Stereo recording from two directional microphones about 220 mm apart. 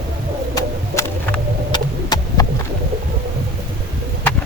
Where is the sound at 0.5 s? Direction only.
15° left (ahead or behind).